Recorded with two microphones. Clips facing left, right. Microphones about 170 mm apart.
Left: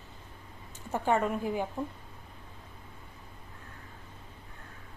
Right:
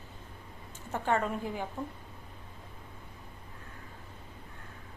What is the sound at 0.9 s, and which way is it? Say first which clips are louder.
Speech: left 2 dB; 15° left (ahead or behind).